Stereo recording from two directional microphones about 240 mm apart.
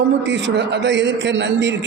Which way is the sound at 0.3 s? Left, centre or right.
Right.